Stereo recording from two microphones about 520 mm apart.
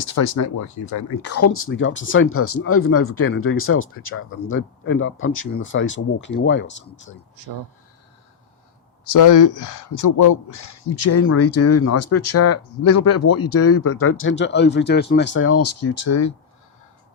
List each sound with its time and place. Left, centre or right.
0.0 s speech: left
0.4 s speech: left
9.1 s speech: left